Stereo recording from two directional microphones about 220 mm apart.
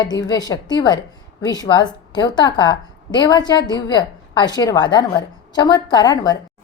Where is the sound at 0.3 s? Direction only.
15° left (ahead or behind).